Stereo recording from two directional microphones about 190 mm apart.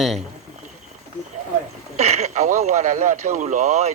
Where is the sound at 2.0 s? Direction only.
35° right (ahead or behind).